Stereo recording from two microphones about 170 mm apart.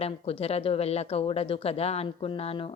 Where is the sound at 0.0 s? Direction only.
35° left (ahead or behind).